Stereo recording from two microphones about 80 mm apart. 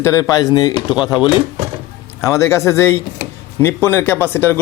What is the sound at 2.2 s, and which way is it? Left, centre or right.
Speech, left.